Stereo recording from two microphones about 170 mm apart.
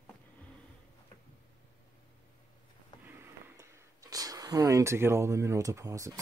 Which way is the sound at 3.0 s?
15° right (ahead or behind).